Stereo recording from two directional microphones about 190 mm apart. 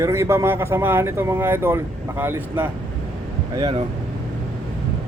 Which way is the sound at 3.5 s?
25° right (ahead or behind).